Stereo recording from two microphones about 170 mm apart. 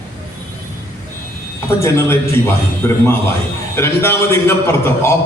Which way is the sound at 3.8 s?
15° left (ahead or behind).